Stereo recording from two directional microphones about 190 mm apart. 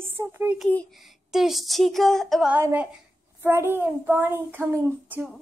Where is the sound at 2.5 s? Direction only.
10° right (ahead or behind).